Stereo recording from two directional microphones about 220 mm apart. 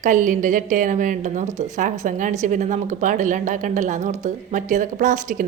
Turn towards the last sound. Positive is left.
turn(degrees=-35)  # may be behind; listen again after turning